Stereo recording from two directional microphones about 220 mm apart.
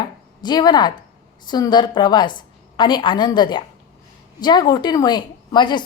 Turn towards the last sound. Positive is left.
turn(degrees=20)  # may be behind; listen again after turning